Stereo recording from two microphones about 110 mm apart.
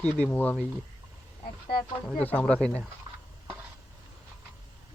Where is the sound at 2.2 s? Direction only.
15° left (ahead or behind).